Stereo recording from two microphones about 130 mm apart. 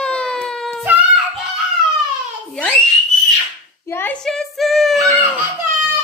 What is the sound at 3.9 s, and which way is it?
Speech, 15° left (ahead or behind).